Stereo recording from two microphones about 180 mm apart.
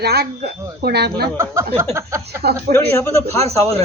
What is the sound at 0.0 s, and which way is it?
Speech, 60° right (ahead or behind).